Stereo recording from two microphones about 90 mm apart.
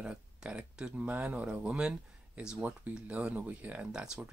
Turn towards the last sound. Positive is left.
turn(degrees=-10)  # may be behind; listen again after turning